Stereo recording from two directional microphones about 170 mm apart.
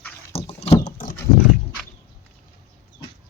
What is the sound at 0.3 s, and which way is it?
Rowboat, 35° left (ahead or behind).